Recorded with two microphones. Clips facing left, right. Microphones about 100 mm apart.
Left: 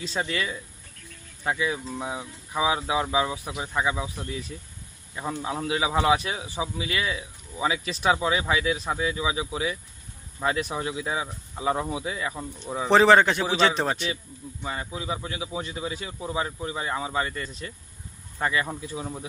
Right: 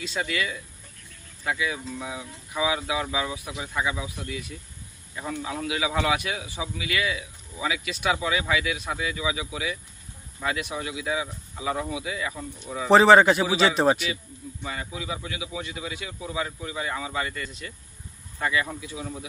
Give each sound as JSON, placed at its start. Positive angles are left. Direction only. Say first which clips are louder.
{"t": 0.0, "sound": "speech", "louder": "even", "side_deg": 30}
{"t": 12.9, "sound": "a man's voice", "louder": "right 2 dB", "side_deg": 0}
{"t": 14.6, "sound": "speech", "louder": "left 2 dB", "side_deg": 30}